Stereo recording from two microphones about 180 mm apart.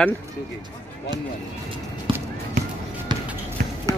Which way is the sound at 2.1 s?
30° right (ahead or behind).